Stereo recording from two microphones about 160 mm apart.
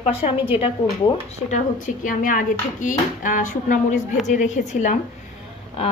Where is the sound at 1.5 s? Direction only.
50° left (ahead or behind).